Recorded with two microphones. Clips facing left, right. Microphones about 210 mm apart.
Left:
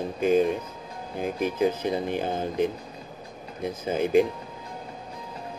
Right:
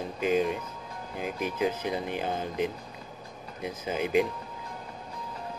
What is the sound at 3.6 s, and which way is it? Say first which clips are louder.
Speech: left 5 dB; 40° left (ahead or behind).